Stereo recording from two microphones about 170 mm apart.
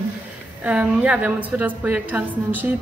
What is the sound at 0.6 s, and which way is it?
Speech, 5° right (ahead or behind).